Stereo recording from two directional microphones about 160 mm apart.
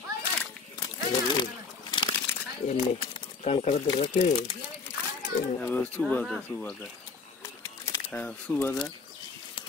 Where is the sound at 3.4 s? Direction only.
40° left (ahead or behind).